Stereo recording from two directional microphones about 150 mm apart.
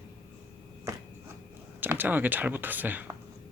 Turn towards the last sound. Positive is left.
turn(degrees=-10)  # may be behind; listen again after turning